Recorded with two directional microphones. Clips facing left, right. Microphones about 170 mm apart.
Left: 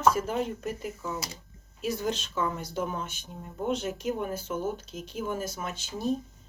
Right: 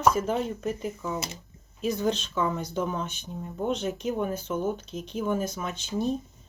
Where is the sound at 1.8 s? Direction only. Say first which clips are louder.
Right 4 dB; 5° left (ahead or behind).